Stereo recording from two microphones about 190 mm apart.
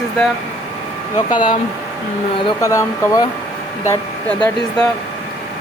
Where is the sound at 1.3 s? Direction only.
25° left (ahead or behind).